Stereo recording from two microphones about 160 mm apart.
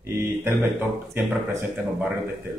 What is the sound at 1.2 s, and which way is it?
Speech, 15° right (ahead or behind).